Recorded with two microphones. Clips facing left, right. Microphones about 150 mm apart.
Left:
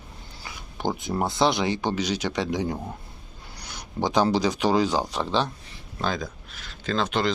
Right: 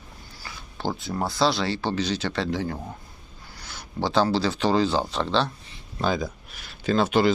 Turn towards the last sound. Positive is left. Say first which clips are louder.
# right 4 dB
turn(degrees=-5)  # may be behind; listen again after turning